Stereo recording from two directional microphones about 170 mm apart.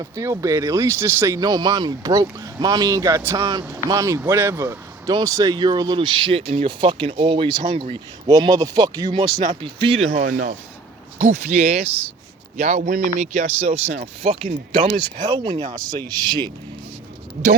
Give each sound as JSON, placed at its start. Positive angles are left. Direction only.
{"t": 0.0, "sound": "speech", "side_deg": -15}
{"t": 10.1, "sound": "speech", "side_deg": -45}